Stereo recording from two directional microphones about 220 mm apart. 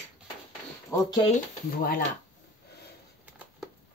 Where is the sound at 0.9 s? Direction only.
20° left (ahead or behind).